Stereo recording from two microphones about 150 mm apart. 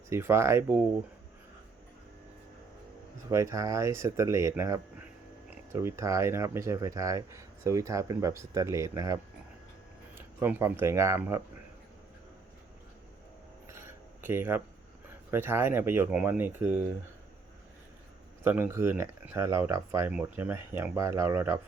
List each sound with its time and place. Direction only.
0.1 s speech: 15° right (ahead or behind)
3.2 s speech: 20° right (ahead or behind)
10.2 s speech: 15° right (ahead or behind)
13.7 s a sound: 15° right (ahead or behind)
15.3 s speech: 15° right (ahead or behind)
18.4 s speech: 10° right (ahead or behind)